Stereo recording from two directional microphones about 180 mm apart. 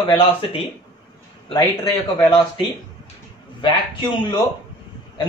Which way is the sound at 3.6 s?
25° left (ahead or behind).